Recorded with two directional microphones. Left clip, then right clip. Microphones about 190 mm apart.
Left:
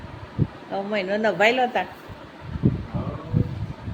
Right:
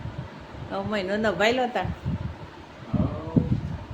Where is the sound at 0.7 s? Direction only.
Centre (ahead or behind).